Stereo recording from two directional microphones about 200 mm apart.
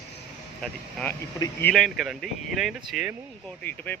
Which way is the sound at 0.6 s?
5° left (ahead or behind).